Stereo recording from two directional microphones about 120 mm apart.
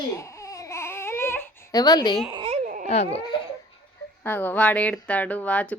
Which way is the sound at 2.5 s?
90° right.